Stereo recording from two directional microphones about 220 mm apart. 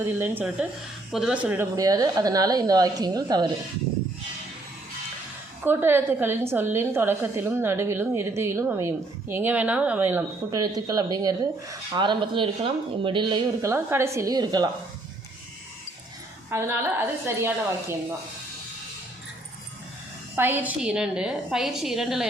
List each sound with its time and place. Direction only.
0.0 s a woman's voice: 10° right (ahead or behind)
5.6 s a woman's voice: 10° right (ahead or behind)
16.5 s a woman's voice: 10° right (ahead or behind)
20.3 s a woman's voice: 10° right (ahead or behind)